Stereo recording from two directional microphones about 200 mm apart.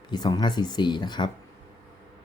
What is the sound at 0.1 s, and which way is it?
Speech, 20° left (ahead or behind).